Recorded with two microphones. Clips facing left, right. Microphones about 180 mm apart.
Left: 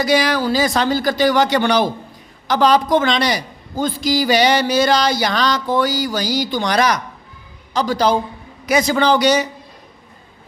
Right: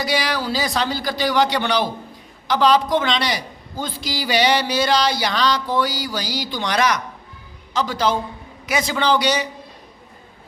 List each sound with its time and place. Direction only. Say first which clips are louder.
0.0 s a man's voice: left 6 dB; 45° left (ahead or behind)